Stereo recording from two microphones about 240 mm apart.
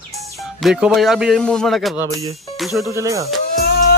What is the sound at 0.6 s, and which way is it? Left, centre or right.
Speech, centre.